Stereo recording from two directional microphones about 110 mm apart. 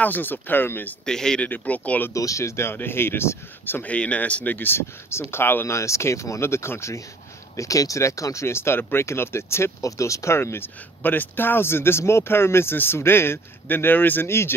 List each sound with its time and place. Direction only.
0.0 s speech: 15° left (ahead or behind)
1.0 s speech: 5° left (ahead or behind)
2.1 s speech: 30° left (ahead or behind)